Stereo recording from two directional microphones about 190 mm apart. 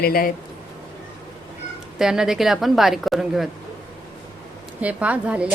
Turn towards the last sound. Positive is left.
turn(degrees=-5)  # may be behind; listen again after turning